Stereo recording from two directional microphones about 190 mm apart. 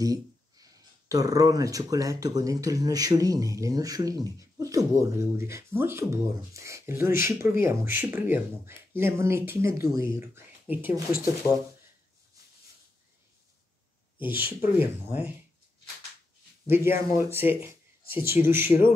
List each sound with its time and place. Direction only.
0.0 s speech: 20° right (ahead or behind)
14.2 s speech: 10° right (ahead or behind)
16.6 s speech: 10° right (ahead or behind)